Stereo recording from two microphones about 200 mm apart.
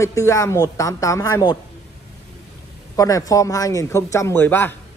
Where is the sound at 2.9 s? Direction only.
15° left (ahead or behind).